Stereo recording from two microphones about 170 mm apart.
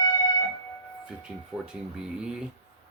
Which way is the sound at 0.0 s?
25° left (ahead or behind).